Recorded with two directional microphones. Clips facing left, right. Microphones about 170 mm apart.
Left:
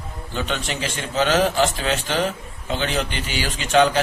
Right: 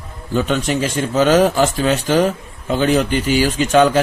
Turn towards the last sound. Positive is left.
turn(degrees=-45)  # may be behind; listen again after turning